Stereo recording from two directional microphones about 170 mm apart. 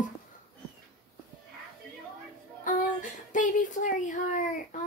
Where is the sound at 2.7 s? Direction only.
50° left (ahead or behind).